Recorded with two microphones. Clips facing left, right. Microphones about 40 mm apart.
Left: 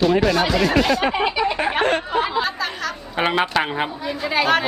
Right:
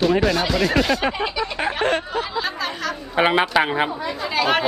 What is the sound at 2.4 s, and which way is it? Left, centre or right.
Speech, centre.